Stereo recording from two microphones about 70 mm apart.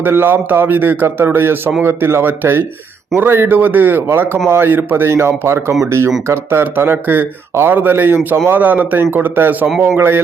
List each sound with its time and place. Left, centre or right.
0.0 s a man's voice: right